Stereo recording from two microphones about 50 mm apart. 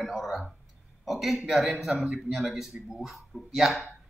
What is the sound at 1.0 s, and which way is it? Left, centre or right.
Speech, centre.